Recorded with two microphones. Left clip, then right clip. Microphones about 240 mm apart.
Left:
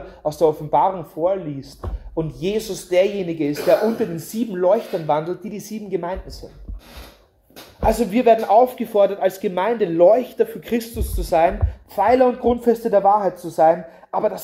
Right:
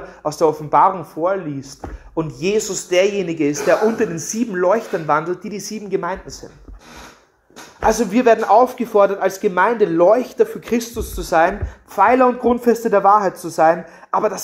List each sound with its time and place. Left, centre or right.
0.2 s a man's voice: right
7.8 s a man's voice: right